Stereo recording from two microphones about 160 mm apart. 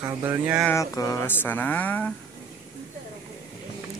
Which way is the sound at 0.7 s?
20° left (ahead or behind).